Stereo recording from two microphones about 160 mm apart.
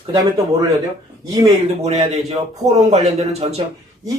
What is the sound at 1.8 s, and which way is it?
Speech, 45° right (ahead or behind).